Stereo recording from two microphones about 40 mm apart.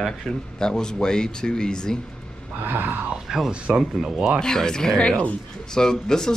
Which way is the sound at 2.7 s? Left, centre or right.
Right.